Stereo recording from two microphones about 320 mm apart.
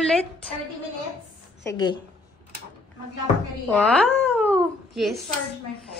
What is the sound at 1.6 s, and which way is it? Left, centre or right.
Speech, centre.